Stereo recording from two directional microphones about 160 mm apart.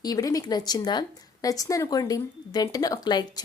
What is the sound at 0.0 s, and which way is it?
Speech, 25° left (ahead or behind).